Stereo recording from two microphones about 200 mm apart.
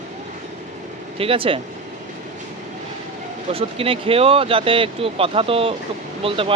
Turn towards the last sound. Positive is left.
turn(degrees=-30)  # may be behind; listen again after turning